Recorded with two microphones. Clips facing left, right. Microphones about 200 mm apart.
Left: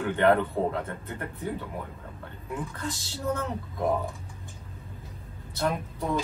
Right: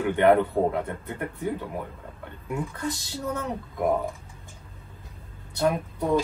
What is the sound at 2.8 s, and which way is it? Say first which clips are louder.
Speech: right 3 dB; 15° right (ahead or behind).